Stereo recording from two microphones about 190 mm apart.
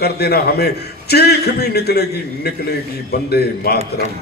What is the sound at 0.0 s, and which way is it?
A man's voice, 55° left (ahead or behind).